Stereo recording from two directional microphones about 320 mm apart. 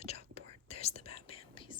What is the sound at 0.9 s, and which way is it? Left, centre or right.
Whispering, centre.